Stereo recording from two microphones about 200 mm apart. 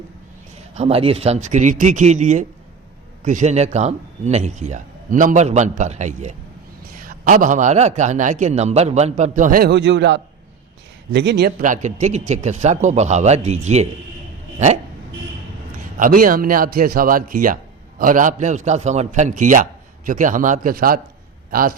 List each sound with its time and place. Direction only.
0.7 s a man's voice: 30° right (ahead or behind)
16.0 s a man's voice: 45° right (ahead or behind)